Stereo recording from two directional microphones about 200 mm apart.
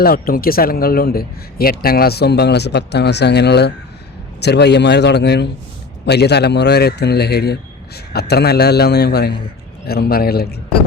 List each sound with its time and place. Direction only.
0.0 s a man's voice: 45° left (ahead or behind)